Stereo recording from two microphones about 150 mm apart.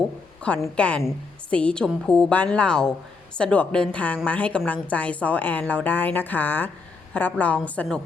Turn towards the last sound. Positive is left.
turn(degrees=10)  # may be behind; listen again after turning